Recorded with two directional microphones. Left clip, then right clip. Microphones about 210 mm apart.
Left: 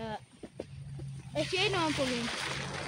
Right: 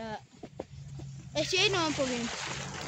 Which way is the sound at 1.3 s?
45° right (ahead or behind).